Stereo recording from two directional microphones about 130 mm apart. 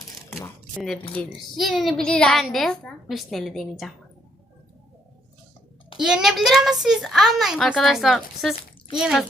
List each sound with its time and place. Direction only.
0.3 s speech: 20° left (ahead or behind)
1.3 s a child's voice: centre (ahead or behind)
6.0 s a child's voice: 5° right (ahead or behind)